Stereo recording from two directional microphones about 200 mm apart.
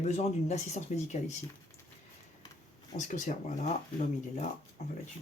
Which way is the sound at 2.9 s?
40° left (ahead or behind).